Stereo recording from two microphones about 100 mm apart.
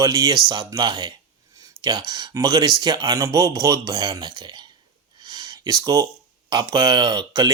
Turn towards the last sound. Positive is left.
turn(degrees=-45)  # may be behind; listen again after turning